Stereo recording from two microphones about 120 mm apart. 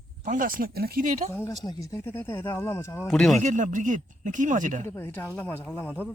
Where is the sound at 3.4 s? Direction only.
90° right.